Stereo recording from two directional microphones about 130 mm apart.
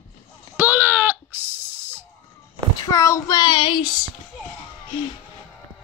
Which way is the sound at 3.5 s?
35° left (ahead or behind).